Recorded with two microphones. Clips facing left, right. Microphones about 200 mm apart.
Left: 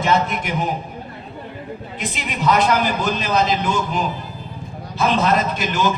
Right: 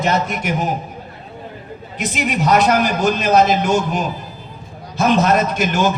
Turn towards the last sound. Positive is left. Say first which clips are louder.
# right 3 dB
turn(degrees=-45)  # may be behind; listen again after turning